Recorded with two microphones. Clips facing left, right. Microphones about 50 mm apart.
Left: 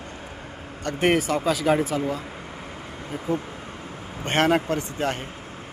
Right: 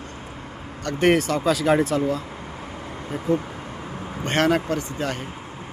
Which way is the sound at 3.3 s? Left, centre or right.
Centre.